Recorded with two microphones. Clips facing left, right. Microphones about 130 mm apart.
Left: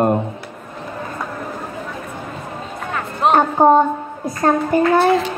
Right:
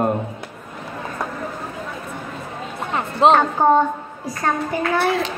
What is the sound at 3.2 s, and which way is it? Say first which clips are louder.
Speech: right 2 dB; 20° right (ahead or behind).